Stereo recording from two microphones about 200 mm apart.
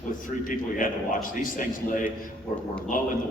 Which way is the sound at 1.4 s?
45° left (ahead or behind).